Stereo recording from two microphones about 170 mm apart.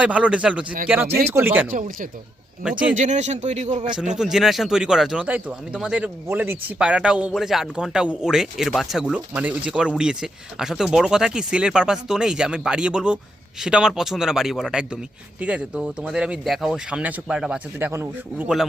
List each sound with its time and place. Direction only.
0.0 s speech: 5° right (ahead or behind)
2.6 s speech: 10° right (ahead or behind)
2.9 s a man's voice: 45° right (ahead or behind)
4.1 s speech: 5° right (ahead or behind)